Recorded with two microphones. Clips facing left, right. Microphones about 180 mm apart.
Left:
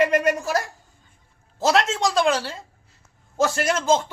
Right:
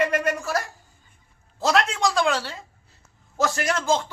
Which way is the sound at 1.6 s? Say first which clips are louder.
Left 1 dB; 20° left (ahead or behind).